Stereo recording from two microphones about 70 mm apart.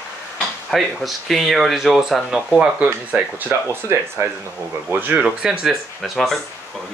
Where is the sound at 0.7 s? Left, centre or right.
Centre.